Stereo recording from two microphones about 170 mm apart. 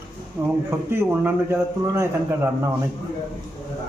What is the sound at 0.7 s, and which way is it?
A man's voice, 15° right (ahead or behind).